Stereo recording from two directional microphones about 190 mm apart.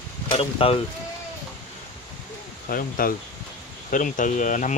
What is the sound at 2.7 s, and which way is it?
Speech, 50° left (ahead or behind).